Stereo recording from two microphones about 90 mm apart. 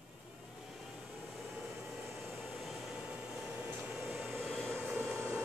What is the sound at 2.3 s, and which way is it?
Air conditioning, 5° right (ahead or behind).